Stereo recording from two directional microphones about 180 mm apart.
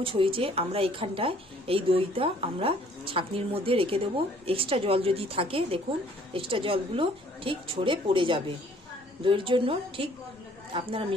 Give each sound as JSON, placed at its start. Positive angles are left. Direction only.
{"t": 0.0, "sound": "a woman's voice", "side_deg": -30}